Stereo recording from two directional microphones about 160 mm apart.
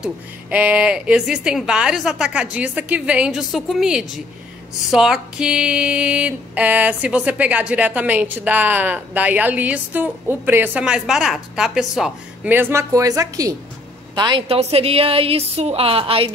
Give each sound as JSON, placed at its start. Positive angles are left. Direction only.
{"t": 0.0, "sound": "speech", "side_deg": -10}
{"t": 4.9, "sound": "a sound", "side_deg": -5}
{"t": 12.5, "sound": "a woman's voice", "side_deg": -15}